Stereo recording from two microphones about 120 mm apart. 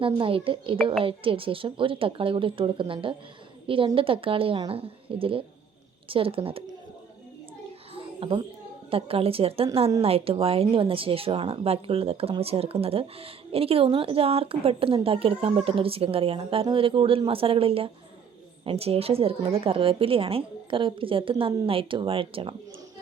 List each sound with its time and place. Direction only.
0.0 s a woman's voice: 50° right (ahead or behind)
7.9 s a sound: 50° right (ahead or behind)
8.9 s a woman's voice: 50° right (ahead or behind)